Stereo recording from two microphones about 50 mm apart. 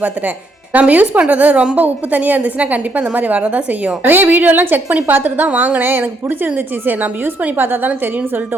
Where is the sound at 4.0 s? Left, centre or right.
Right.